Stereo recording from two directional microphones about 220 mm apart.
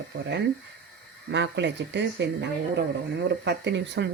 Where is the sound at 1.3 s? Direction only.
55° right (ahead or behind).